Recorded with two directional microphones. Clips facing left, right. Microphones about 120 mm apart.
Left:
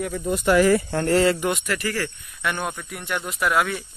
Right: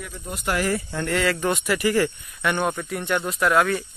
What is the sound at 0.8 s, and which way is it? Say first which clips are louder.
Speech: left 5 dB; 40° left (ahead or behind).